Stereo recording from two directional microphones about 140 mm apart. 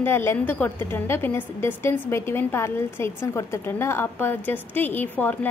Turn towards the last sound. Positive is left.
turn(degrees=10)  # may be behind; listen again after turning